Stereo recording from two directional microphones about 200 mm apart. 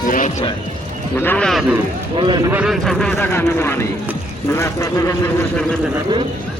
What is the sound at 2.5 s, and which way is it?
A man's voice, 5° right (ahead or behind).